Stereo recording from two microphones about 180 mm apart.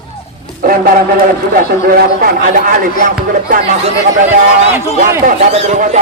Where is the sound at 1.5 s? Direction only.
55° right (ahead or behind).